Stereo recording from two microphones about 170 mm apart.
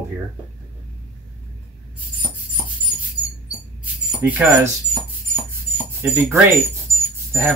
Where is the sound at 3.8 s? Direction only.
10° right (ahead or behind).